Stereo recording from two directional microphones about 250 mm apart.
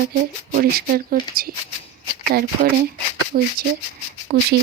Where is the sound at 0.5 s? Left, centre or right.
Right.